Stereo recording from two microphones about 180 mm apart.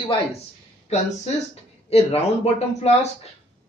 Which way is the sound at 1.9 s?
35° left (ahead or behind).